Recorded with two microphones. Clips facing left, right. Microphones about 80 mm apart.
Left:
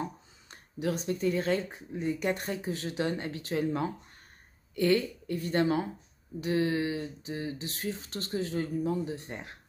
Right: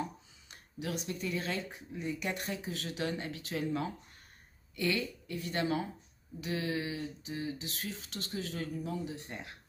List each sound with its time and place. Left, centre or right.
0.0 s speech: left